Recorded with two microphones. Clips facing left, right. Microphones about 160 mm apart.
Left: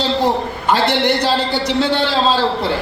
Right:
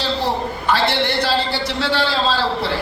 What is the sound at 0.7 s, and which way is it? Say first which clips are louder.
A man's voice: left 4 dB; 15° left (ahead or behind).